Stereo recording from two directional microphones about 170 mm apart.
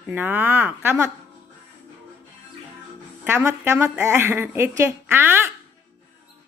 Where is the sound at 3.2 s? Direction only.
15° right (ahead or behind).